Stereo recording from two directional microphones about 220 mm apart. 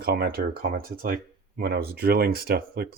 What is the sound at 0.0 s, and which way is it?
Speech, 45° right (ahead or behind).